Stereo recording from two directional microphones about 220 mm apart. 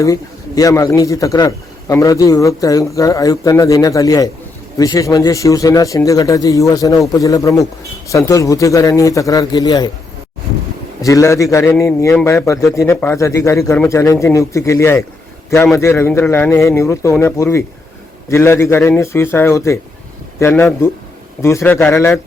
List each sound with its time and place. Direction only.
0.0 s a man's voice: 15° left (ahead or behind)
11.0 s a man's voice: 15° left (ahead or behind)